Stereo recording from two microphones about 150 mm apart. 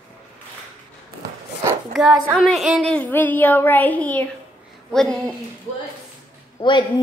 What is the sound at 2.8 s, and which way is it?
A woman's voice, 10° left (ahead or behind).